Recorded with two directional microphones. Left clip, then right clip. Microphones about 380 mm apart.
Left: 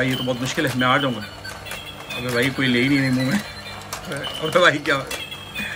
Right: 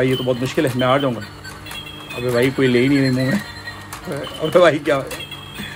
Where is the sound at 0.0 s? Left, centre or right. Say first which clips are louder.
Right 4 dB; centre.